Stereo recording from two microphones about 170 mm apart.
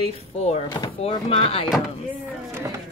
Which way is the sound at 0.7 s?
25° left (ahead or behind).